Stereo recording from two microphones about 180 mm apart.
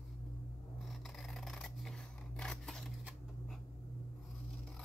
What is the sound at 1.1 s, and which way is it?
Scissors, centre (ahead or behind).